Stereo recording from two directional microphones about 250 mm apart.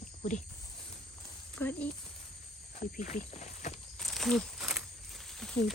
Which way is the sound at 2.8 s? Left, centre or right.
Left.